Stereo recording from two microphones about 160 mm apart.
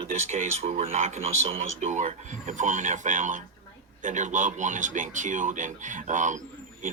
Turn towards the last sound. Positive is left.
turn(degrees=-50)  # may be behind; listen again after turning